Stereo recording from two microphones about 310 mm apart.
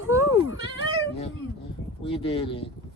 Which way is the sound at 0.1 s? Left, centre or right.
Centre.